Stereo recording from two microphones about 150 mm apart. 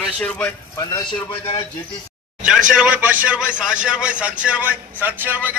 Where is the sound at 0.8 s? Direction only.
25° left (ahead or behind).